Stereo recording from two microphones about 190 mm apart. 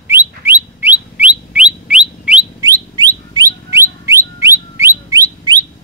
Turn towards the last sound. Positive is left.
turn(degrees=-20)  # may be behind; listen again after turning